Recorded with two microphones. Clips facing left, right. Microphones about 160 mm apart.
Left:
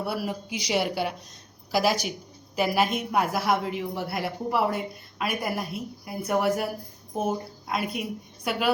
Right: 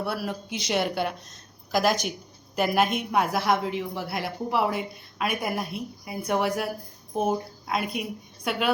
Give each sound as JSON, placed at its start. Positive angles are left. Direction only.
{"t": 0.0, "sound": "a woman's voice", "side_deg": 10}